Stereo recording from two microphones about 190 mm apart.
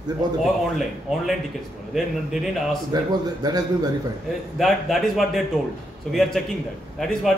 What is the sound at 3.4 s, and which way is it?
Speech, 20° right (ahead or behind).